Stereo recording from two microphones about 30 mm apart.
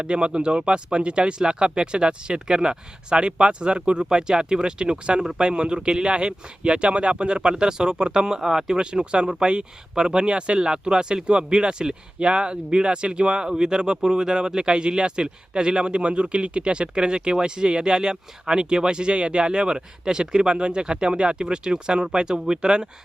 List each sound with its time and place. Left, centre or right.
0.0 s speech: right